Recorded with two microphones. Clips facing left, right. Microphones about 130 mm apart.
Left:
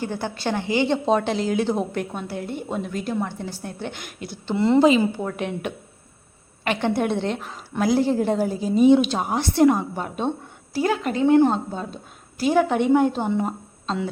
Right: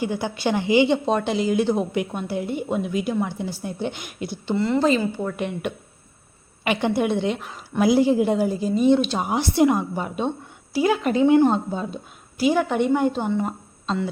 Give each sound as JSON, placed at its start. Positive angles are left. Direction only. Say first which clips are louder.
{"t": 0.0, "sound": "a woman's voice", "louder": "right 2 dB", "side_deg": -10}
{"t": 1.0, "sound": "a woman's voice", "louder": "even", "side_deg": 0}
{"t": 4.5, "sound": "a woman's voice", "louder": "left 3 dB", "side_deg": 20}
{"t": 4.8, "sound": "a woman's voice", "louder": "left 3 dB", "side_deg": 5}
{"t": 11.0, "sound": "a woman's voice", "louder": "even", "side_deg": -15}